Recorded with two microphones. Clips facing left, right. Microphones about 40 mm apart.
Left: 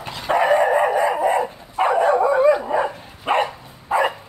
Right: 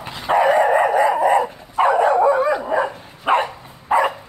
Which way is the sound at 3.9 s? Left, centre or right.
Right.